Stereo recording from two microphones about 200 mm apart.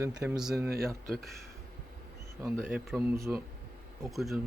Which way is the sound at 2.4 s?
10° right (ahead or behind).